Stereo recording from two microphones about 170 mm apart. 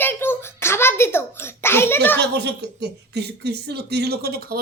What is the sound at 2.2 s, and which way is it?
Speech, 85° right.